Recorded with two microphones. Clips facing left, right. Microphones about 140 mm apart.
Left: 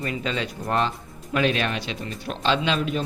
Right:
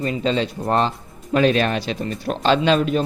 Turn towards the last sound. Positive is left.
turn(degrees=-45)  # may be behind; listen again after turning